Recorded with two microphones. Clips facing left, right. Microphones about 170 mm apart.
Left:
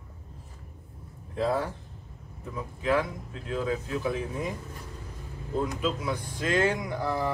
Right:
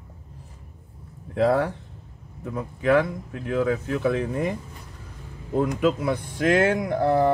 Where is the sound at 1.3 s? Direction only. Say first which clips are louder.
Right 7 dB; 70° right (ahead or behind).